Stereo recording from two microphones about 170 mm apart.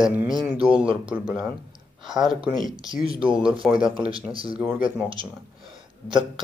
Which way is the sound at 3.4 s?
5° right (ahead or behind).